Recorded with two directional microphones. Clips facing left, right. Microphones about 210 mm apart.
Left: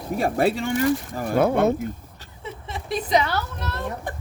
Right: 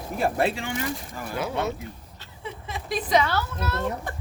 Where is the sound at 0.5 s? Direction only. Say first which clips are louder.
Left 8 dB; 40° left (ahead or behind).